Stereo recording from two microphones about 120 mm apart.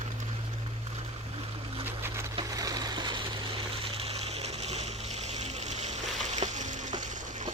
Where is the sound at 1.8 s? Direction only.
20° right (ahead or behind).